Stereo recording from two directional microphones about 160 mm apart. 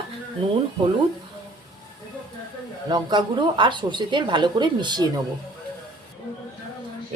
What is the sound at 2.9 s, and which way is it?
A woman's voice, 30° right (ahead or behind).